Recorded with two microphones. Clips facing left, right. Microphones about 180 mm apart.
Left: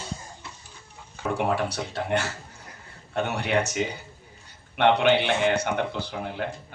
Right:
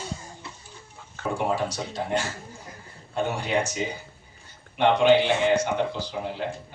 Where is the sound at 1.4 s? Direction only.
60° left (ahead or behind).